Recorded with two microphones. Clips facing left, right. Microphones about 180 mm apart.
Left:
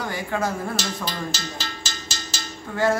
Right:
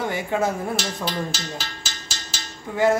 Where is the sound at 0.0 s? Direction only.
25° right (ahead or behind).